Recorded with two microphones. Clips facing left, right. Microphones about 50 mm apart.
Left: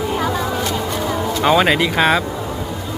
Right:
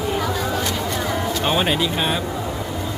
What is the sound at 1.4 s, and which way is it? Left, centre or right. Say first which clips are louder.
Speech: left 7 dB; left.